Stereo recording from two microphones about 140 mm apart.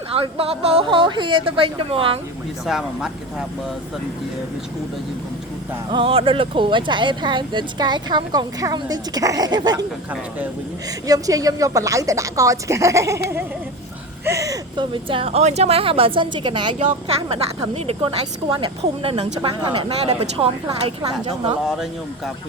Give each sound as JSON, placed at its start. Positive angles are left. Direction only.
{"t": 0.1, "sound": "speech", "side_deg": -40}
{"t": 2.6, "sound": "speech", "side_deg": -5}
{"t": 5.9, "sound": "speech", "side_deg": -40}
{"t": 11.0, "sound": "a woman's voice", "side_deg": -25}